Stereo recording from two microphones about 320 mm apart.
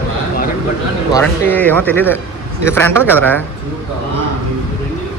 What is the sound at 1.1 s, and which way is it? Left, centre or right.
Speech, centre.